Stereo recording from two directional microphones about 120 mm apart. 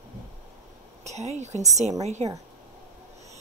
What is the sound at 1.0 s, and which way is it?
Speech, 65° right (ahead or behind).